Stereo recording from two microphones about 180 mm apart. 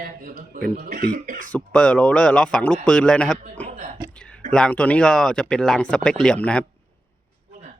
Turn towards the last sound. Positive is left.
turn(degrees=5)  # may be behind; listen again after turning